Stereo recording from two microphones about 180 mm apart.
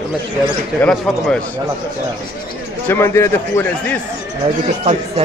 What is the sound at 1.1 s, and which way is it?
Speech, centre (ahead or behind).